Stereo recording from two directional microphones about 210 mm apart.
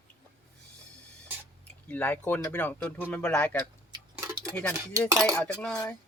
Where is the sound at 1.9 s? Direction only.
5° left (ahead or behind).